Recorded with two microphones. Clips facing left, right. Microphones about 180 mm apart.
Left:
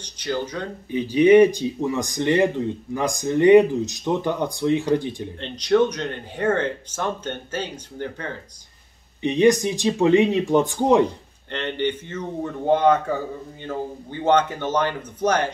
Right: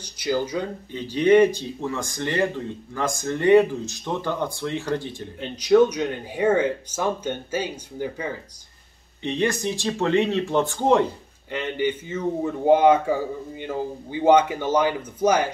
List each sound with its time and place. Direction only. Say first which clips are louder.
0.0 s speech: right 2 dB; 10° right (ahead or behind)
0.9 s speech: left 3 dB; 15° left (ahead or behind)
5.4 s speech: right 2 dB; 10° right (ahead or behind)
9.2 s speech: left 7 dB; 15° left (ahead or behind)
11.5 s speech: even; 5° right (ahead or behind)